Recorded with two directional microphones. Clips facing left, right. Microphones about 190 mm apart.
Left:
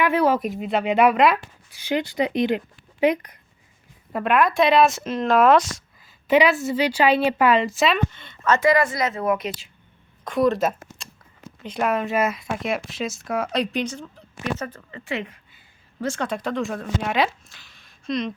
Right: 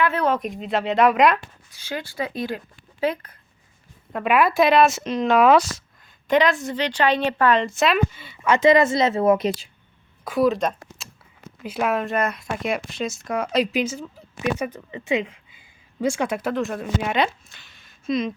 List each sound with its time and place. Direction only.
0.0 s speech: 10° left (ahead or behind)
1.7 s speech: 15° left (ahead or behind)
4.1 s speech: 5° right (ahead or behind); by 9.6 s 30° right (ahead or behind)
10.2 s speech: 5° right (ahead or behind)